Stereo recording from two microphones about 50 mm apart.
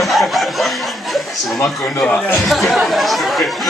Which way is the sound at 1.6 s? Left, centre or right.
Centre.